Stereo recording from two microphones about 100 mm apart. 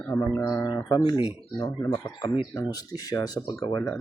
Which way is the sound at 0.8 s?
45° left (ahead or behind).